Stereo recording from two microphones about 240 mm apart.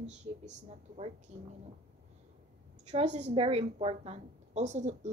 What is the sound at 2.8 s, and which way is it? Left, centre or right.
Child singing, right.